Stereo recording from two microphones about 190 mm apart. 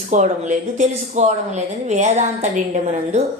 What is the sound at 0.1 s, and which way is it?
Speech, 40° right (ahead or behind).